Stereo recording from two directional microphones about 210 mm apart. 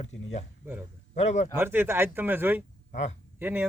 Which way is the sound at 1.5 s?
10° right (ahead or behind).